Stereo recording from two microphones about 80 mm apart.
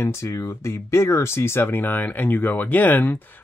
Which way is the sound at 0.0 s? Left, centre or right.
Left.